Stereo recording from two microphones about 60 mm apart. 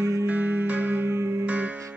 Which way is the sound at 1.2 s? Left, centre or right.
Right.